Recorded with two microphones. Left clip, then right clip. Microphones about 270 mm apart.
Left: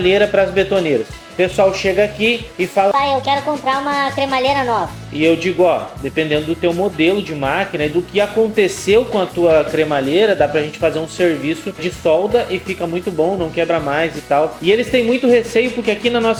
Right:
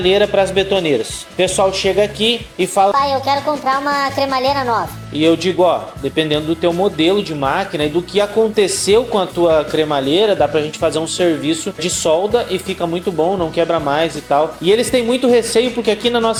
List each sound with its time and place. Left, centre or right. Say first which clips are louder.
0.0 s a woman's voice: even; right
5.2 s speech: even; right